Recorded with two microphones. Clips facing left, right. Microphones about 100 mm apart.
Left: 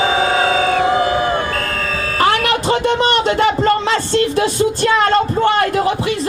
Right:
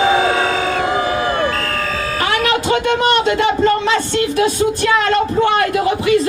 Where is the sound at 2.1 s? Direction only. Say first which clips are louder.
Left 2 dB; 35° left (ahead or behind).